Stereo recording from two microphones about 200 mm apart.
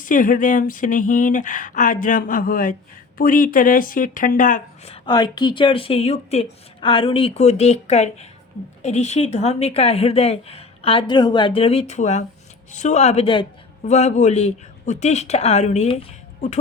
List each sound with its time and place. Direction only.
0.0 s a woman's voice: 40° left (ahead or behind)
5.0 s a woman's voice: 20° left (ahead or behind)